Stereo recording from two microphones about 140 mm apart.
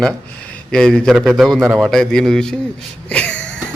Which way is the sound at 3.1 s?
10° left (ahead or behind).